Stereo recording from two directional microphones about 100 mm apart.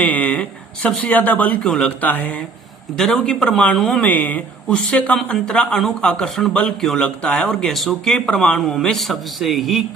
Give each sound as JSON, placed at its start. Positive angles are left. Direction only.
{"t": 0.0, "sound": "speech", "side_deg": 15}
{"t": 3.0, "sound": "speech", "side_deg": 5}